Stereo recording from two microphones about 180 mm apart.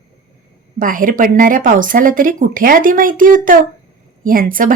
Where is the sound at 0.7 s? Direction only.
50° right (ahead or behind).